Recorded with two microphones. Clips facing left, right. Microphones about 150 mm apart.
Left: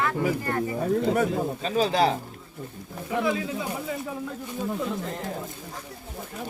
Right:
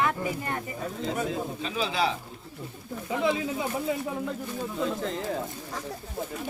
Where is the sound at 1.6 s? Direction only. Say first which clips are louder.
Left 6 dB; 40° left (ahead or behind).